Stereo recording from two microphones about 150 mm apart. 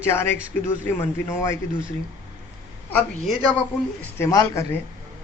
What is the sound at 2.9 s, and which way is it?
Speech, 10° left (ahead or behind).